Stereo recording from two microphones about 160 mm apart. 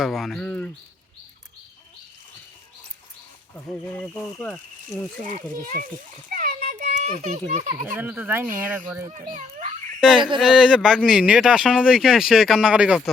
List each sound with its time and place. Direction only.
0.0 s speech: centre (ahead or behind)
3.5 s speech: 5° left (ahead or behind)
5.2 s a child's voice: 55° right (ahead or behind)
6.3 s children playing: 60° right (ahead or behind)
7.9 s speech: 10° right (ahead or behind)
9.0 s a child's voice: 50° right (ahead or behind)
10.0 s speech: 5° right (ahead or behind)